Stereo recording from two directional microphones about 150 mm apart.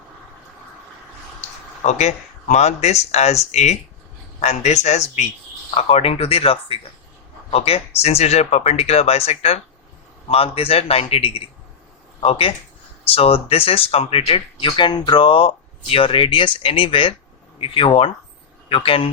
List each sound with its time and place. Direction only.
1.4 s speech: 50° left (ahead or behind)